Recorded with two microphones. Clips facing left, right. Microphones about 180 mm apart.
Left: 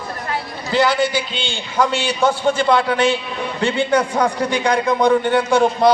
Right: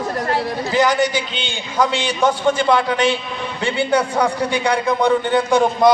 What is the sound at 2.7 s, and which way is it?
A man's voice, 15° right (ahead or behind).